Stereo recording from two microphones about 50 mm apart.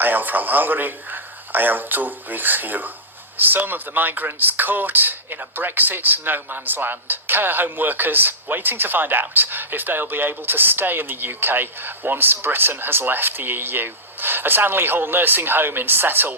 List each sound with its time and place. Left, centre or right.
0.0 s a man's voice: right